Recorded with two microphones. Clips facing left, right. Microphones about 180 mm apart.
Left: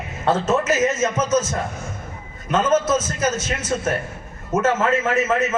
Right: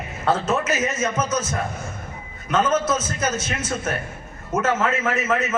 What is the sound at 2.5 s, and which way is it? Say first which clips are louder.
Speech: left 2 dB; 25° left (ahead or behind).